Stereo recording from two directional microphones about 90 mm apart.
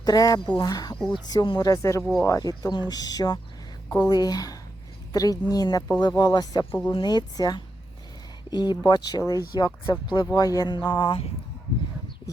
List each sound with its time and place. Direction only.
0.0 s speech: 45° left (ahead or behind)
0.9 s speech: 5° left (ahead or behind)
1.3 s speech: 50° left (ahead or behind)
10.7 s speech: 55° left (ahead or behind)